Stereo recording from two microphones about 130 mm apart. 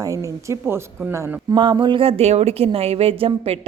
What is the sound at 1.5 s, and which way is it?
A woman's voice, 35° right (ahead or behind).